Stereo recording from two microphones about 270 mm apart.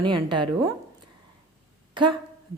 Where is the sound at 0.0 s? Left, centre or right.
Centre.